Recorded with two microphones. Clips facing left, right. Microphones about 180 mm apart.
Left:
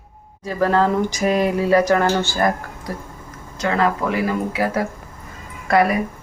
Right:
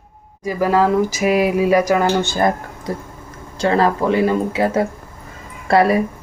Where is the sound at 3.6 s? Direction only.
30° right (ahead or behind).